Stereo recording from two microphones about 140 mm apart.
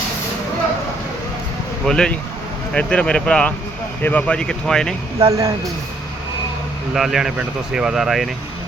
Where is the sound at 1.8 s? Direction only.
5° left (ahead or behind).